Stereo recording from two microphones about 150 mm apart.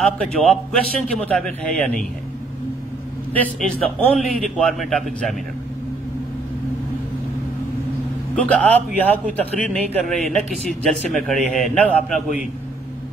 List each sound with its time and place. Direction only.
0.0 s a man's voice: centre (ahead or behind)
3.3 s a man's voice: 5° left (ahead or behind)
8.4 s a man's voice: 10° left (ahead or behind)